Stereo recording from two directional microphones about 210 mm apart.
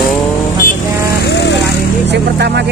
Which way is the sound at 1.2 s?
55° left (ahead or behind).